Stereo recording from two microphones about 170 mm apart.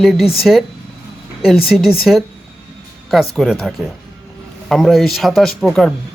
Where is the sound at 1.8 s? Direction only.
Centre (ahead or behind).